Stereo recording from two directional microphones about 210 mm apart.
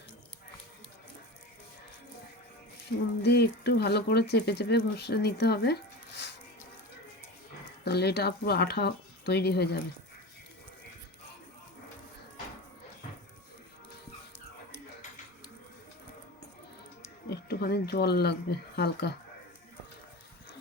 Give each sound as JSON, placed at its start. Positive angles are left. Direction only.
{"t": 3.2, "sound": "speech", "side_deg": 50}
{"t": 7.9, "sound": "speech", "side_deg": 50}
{"t": 17.2, "sound": "speech", "side_deg": 50}